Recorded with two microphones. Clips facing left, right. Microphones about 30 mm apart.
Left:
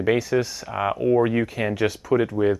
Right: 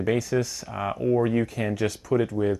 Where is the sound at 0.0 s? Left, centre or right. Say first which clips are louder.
Left 3 dB; left.